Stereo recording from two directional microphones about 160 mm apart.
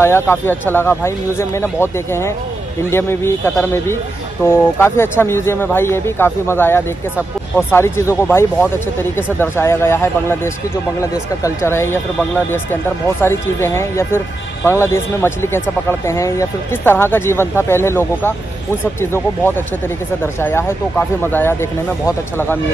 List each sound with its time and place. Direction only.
0.0 s speech: 15° left (ahead or behind)